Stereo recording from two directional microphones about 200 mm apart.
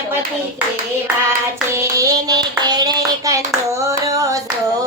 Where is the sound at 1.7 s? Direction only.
15° right (ahead or behind).